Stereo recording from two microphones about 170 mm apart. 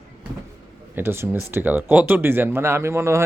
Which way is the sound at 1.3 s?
10° right (ahead or behind).